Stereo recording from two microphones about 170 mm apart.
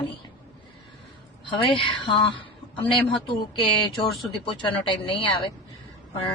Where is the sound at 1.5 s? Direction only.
30° left (ahead or behind).